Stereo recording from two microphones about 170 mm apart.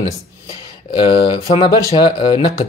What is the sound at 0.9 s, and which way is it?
Speech, 30° left (ahead or behind).